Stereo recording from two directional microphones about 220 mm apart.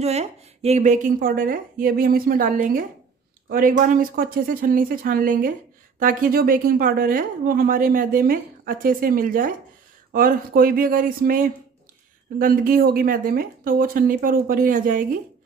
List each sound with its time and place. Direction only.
0.0 s a woman's voice: 30° right (ahead or behind)